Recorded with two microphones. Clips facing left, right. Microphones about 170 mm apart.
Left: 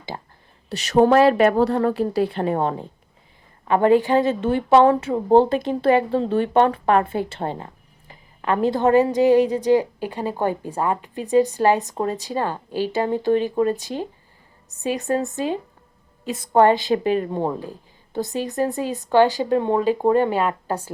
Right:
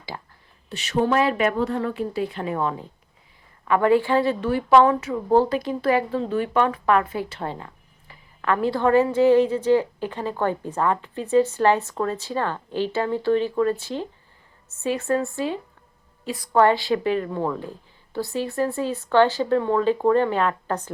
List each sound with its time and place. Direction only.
0.1 s a woman's voice: 30° left (ahead or behind); by 20.9 s 10° left (ahead or behind)